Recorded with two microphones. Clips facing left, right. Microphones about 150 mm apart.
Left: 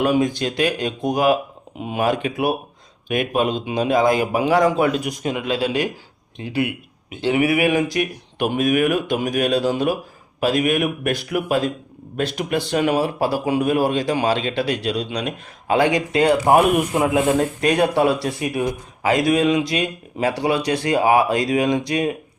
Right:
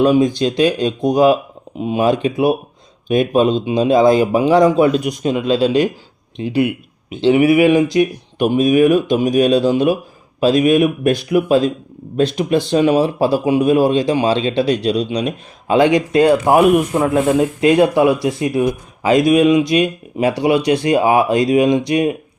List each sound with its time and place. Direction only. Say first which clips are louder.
0.2 s speech: right 6 dB; 20° right (ahead or behind)
16.5 s a man's voice: right 2 dB; centre (ahead or behind)
17.0 s a man's voice: right 3 dB; 15° left (ahead or behind)
17.6 s speech: right 8 dB; 20° right (ahead or behind)